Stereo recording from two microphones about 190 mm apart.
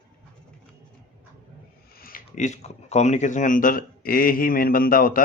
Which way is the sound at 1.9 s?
50° left (ahead or behind).